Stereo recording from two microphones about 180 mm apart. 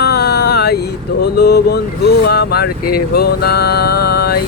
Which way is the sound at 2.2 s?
60° left (ahead or behind).